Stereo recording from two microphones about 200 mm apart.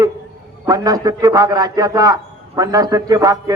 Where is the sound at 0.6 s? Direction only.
20° right (ahead or behind).